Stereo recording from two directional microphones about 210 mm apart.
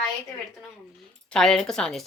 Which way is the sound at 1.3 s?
Centre (ahead or behind).